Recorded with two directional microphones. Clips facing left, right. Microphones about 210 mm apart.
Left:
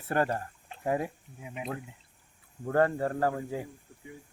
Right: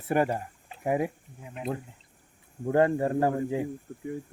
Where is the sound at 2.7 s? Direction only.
15° right (ahead or behind).